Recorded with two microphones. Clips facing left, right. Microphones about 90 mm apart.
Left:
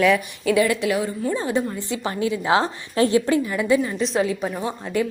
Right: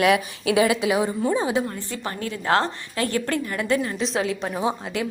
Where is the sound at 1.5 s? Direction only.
Centre (ahead or behind).